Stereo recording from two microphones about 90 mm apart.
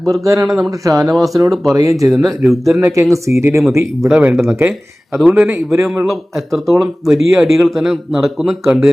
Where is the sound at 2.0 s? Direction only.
Centre (ahead or behind).